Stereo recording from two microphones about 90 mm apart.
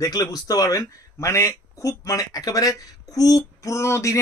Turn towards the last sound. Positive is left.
turn(degrees=35)  # may be behind; listen again after turning